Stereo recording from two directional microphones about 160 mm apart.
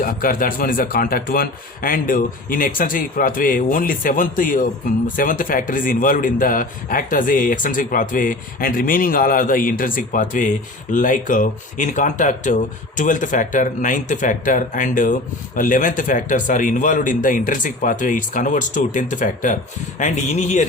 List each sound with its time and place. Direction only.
0.0 s a man's voice: 60° left (ahead or behind); by 20.7 s 45° left (ahead or behind)